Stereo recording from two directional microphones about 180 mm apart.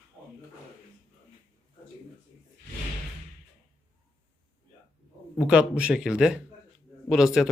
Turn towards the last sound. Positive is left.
turn(degrees=0)  # may be behind; listen again after turning